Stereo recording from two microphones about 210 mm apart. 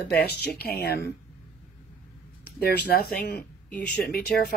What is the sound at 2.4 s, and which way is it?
Speech, 50° left (ahead or behind).